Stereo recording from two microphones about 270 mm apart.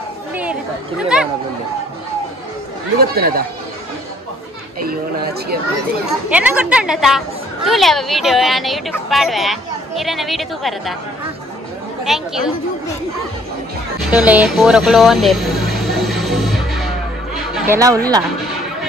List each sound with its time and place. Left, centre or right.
0.3 s speech: centre
3.0 s speech: right
4.8 s speech: right
6.3 s a woman's voice: centre
12.0 s speech: centre
14.1 s vehicle: centre
17.6 s speech: centre